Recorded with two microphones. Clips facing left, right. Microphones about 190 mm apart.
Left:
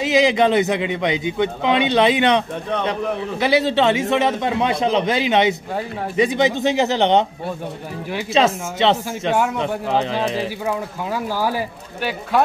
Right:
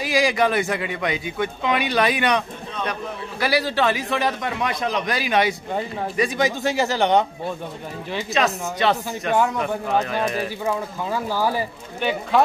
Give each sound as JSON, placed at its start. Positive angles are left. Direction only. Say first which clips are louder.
{"t": 0.0, "sound": "a man's voice", "louder": "left 4 dB", "side_deg": 20}
{"t": 8.3, "sound": "a man's voice", "louder": "left 5 dB", "side_deg": 30}
{"t": 10.6, "sound": "speech", "louder": "left 1 dB", "side_deg": 10}